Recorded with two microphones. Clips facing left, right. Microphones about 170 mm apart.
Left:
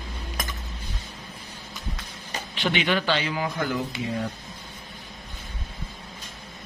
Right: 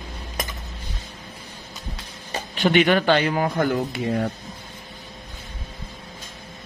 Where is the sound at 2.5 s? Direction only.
50° right (ahead or behind).